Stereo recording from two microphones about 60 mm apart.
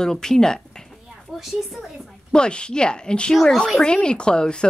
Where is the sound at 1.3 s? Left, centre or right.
Centre.